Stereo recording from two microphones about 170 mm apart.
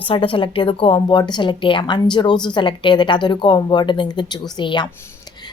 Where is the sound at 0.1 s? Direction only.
30° left (ahead or behind).